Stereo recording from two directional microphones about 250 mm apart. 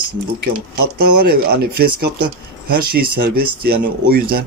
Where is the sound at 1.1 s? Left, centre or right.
Right.